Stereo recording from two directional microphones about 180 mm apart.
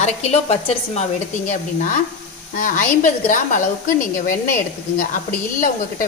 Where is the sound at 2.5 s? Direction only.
45° left (ahead or behind).